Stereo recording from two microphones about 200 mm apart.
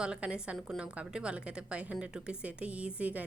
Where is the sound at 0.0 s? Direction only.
5° right (ahead or behind).